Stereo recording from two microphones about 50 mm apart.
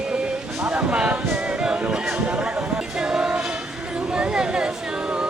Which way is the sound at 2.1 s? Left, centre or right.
Right.